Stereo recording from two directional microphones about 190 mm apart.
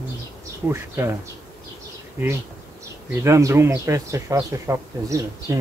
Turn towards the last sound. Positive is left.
turn(degrees=-15)  # may be behind; listen again after turning